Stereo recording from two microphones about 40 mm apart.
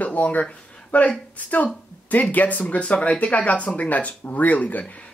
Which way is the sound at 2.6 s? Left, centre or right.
Left.